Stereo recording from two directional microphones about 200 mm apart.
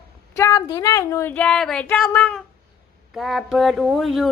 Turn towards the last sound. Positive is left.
turn(degrees=0)  # may be behind; listen again after turning